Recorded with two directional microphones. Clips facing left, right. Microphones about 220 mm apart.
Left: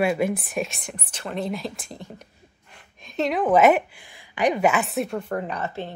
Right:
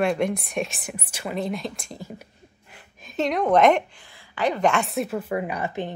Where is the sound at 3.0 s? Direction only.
Centre (ahead or behind).